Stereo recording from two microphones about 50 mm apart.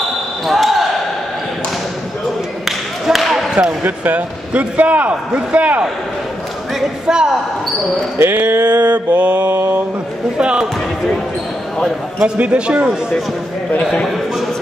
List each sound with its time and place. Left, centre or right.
0.5 s basketball bounce: centre
3.1 s basketball bounce: centre
3.8 s a man's voice: right
7.1 s speech: centre
8.3 s mantra: right
9.6 s mantra: right
10.3 s speech: centre
12.4 s a man's voice: right